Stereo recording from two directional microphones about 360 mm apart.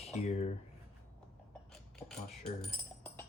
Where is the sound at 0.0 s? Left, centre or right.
Centre.